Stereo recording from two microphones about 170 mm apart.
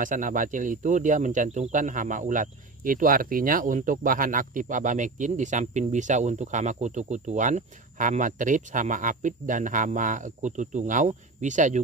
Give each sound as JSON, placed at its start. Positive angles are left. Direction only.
{"t": 0.0, "sound": "speech", "side_deg": -50}